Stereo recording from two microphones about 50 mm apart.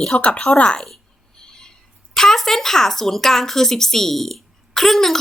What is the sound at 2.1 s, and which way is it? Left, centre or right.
A woman's voice, centre.